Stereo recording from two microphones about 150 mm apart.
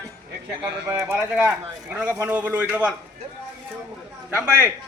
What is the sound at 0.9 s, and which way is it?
Speech, 20° right (ahead or behind).